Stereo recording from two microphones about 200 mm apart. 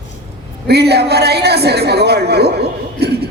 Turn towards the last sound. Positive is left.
turn(degrees=-55)  # may be behind; listen again after turning